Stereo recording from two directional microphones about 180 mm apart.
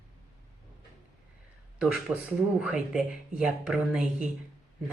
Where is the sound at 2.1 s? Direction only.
15° right (ahead or behind).